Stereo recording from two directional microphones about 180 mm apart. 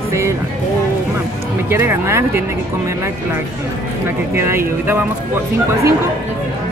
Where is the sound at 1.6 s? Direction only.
15° right (ahead or behind).